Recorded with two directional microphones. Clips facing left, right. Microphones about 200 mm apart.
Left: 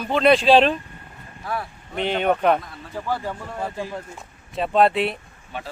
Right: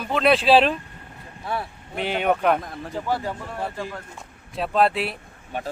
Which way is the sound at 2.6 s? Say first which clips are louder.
Right 6 dB; 45° right (ahead or behind).